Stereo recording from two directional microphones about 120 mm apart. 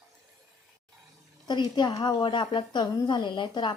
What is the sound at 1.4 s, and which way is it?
A woman's voice, 35° left (ahead or behind).